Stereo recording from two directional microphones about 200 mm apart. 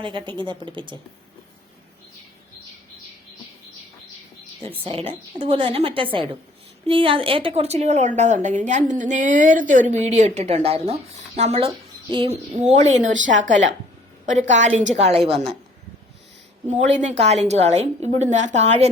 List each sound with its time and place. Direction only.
0.0 s a woman's voice: 25° right (ahead or behind)
4.9 s a woman's voice: 30° right (ahead or behind)
16.6 s a woman's voice: 35° right (ahead or behind)